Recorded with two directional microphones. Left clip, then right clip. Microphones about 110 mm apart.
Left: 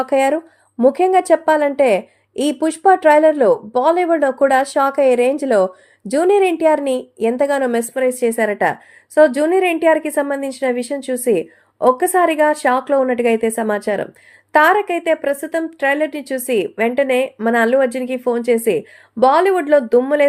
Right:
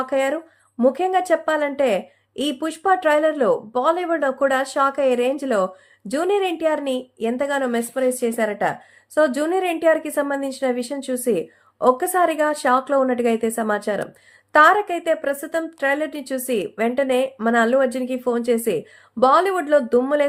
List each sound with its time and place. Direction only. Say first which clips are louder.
0.0 s a woman's voice: left 6 dB; 40° left (ahead or behind)
7.9 s speech: left 1 dB; 15° left (ahead or behind)
8.2 s a woman's voice: left 5 dB; 30° left (ahead or behind)
9.1 s a woman's voice: left 6 dB; 20° left (ahead or behind)